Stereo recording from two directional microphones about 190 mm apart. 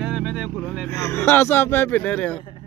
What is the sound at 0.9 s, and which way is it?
A man's voice, 15° left (ahead or behind).